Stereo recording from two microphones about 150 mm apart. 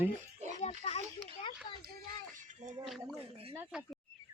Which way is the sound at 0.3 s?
50° right (ahead or behind).